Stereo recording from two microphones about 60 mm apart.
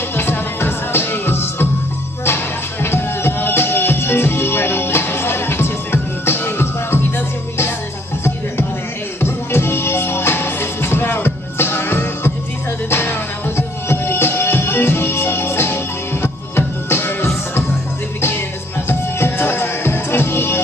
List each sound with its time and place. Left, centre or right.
0.1 s music: left
9.2 s music: left
13.6 s music: left
18.9 s music: left